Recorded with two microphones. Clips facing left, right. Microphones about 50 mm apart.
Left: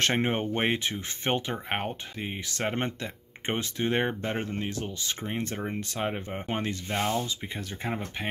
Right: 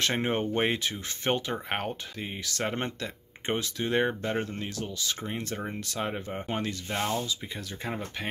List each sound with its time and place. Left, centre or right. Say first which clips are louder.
0.1 s speech: left 1 dB; left
6.5 s speech: left 1 dB; left
6.9 s speech: left 2 dB; centre
7.2 s speech: even; left